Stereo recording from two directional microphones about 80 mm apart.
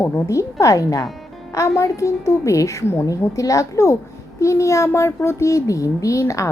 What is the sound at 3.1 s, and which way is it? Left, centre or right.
A woman's voice, left.